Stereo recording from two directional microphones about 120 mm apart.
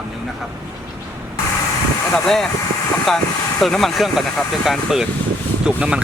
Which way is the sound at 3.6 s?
Centre (ahead or behind).